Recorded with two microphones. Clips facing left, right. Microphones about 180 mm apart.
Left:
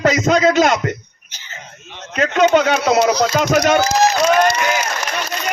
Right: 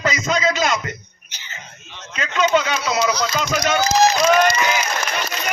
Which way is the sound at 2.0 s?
55° left (ahead or behind).